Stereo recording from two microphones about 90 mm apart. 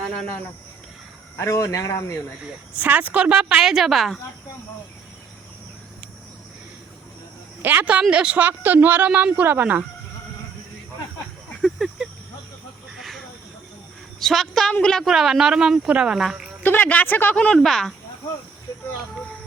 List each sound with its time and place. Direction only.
1.4 s speech: 35° left (ahead or behind)
2.4 s a woman's voice: 15° right (ahead or behind)
7.6 s a woman's voice: 20° right (ahead or behind)
11.6 s a sound: centre (ahead or behind)
13.0 s snake: centre (ahead or behind)
14.2 s speech: 5° left (ahead or behind)
15.1 s speech: 5° right (ahead or behind)
16.6 s speech: 20° left (ahead or behind)
17.3 s speech: 10° left (ahead or behind)